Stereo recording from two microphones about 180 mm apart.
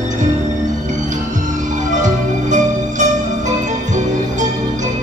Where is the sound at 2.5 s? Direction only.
45° right (ahead or behind).